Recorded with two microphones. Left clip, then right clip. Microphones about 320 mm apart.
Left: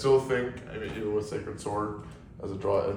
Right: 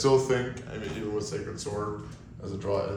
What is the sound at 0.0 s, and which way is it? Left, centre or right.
Speech, centre.